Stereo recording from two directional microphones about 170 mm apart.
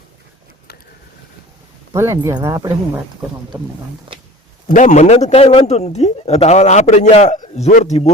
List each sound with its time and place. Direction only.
1.9 s speech: 15° right (ahead or behind)
4.7 s a man's voice: 45° left (ahead or behind)